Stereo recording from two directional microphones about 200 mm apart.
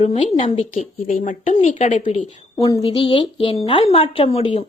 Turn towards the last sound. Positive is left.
turn(degrees=30)  # may be behind; listen again after turning